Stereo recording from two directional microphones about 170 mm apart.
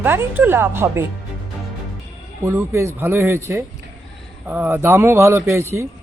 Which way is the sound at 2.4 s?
15° right (ahead or behind).